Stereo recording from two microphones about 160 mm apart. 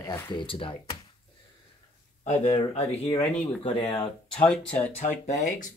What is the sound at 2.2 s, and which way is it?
Speech, 45° left (ahead or behind).